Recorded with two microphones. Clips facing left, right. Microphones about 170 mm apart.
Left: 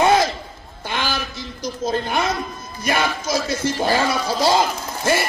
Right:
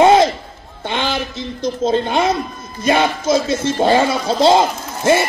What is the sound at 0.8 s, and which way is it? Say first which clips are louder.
A man's voice: right 5 dB; 25° right (ahead or behind).